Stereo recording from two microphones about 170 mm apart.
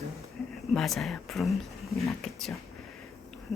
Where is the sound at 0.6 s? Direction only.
Centre (ahead or behind).